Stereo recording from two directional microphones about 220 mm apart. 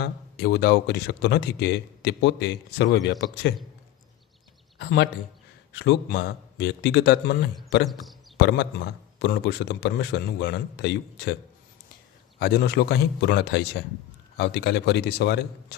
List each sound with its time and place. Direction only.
0.0 s speech: 45° left (ahead or behind)
4.8 s speech: 50° left (ahead or behind)
12.4 s speech: 45° left (ahead or behind)